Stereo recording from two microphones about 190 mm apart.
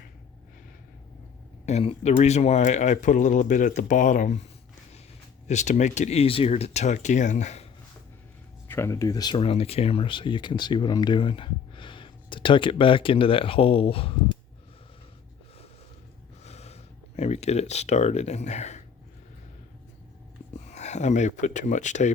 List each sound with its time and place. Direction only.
1.6 s speech: 30° left (ahead or behind)
5.5 s speech: 40° left (ahead or behind)
8.6 s speech: 15° left (ahead or behind); by 14.1 s 30° left (ahead or behind)
16.4 s a sound: 35° left (ahead or behind)
20.7 s speech: 35° left (ahead or behind)